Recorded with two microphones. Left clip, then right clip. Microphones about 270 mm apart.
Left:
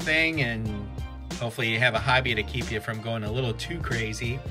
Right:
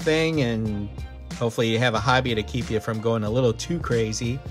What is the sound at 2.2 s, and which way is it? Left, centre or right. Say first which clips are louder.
Speech: right 1 dB; right.